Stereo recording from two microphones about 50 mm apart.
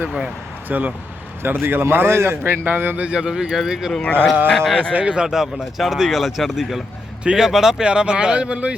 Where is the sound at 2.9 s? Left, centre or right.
Right.